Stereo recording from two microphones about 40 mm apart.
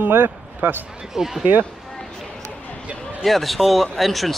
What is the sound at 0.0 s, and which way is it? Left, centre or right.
Speech, right.